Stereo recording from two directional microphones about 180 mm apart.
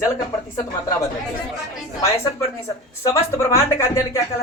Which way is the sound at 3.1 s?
15° left (ahead or behind).